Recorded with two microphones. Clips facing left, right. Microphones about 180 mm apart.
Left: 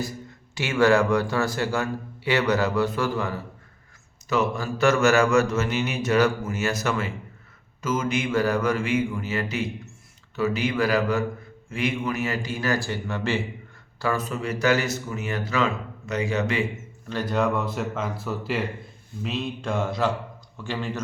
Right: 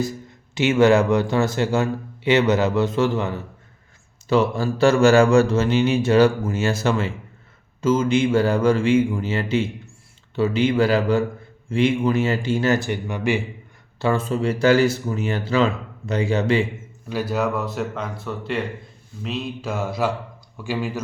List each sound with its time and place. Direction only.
0.5 s speech: 20° right (ahead or behind)
14.0 s speech: 25° right (ahead or behind)
17.1 s speech: 10° right (ahead or behind)